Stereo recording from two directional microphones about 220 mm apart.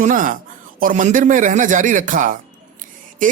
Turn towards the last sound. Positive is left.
turn(degrees=-35)  # may be behind; listen again after turning